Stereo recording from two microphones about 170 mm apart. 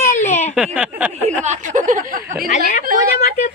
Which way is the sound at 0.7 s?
5° right (ahead or behind).